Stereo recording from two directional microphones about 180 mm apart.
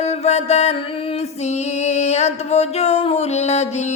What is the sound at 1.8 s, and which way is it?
Music, 40° left (ahead or behind).